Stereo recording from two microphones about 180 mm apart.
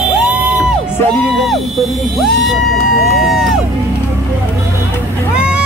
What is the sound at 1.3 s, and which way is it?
Speech, centre (ahead or behind).